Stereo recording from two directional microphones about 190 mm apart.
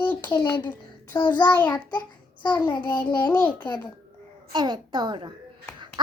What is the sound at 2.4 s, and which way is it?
Child singing, 20° left (ahead or behind).